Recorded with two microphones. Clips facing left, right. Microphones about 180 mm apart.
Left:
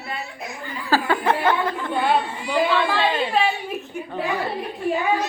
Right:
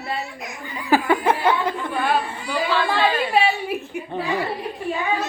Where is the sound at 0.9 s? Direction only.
20° right (ahead or behind).